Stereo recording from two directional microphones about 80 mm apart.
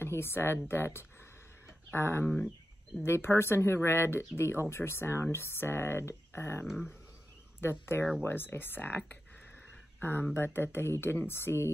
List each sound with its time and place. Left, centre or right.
0.0 s speech: left
2.2 s speech: centre
3.0 s speech: left
6.7 s speech: centre
7.6 s speech: left